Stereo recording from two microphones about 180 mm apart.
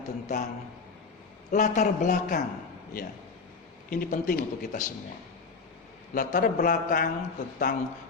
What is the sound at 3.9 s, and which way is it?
Speech, 50° left (ahead or behind).